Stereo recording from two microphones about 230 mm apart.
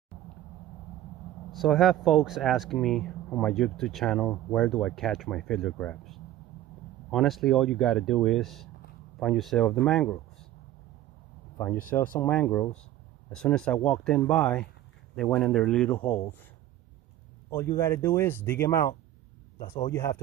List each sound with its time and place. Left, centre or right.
1.5 s speech: centre
11.5 s speech: centre
11.8 s speech: left
12.2 s speech: centre
17.5 s speech: centre